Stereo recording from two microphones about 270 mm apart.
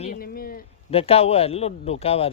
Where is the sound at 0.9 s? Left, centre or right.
Left.